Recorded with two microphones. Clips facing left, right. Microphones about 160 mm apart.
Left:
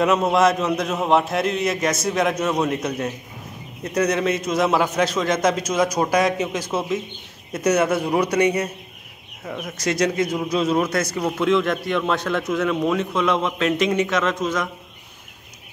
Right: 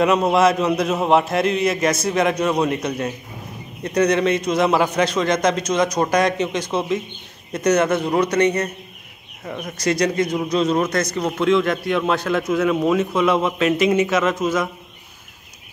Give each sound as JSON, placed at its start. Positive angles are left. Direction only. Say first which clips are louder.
{"t": 0.0, "sound": "a man's voice", "louder": "right 2 dB", "side_deg": 0}